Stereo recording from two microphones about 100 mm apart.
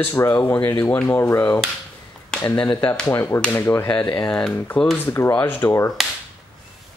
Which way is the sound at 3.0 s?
25° left (ahead or behind).